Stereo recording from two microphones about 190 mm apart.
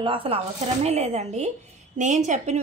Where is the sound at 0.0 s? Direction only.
30° right (ahead or behind).